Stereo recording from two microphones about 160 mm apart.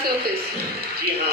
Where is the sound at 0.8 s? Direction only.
75° right (ahead or behind).